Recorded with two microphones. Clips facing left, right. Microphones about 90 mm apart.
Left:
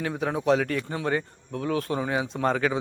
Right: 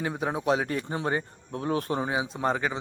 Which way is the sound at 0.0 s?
10° right (ahead or behind).